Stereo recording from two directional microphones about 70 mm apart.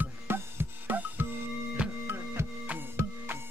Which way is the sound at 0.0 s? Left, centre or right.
Right.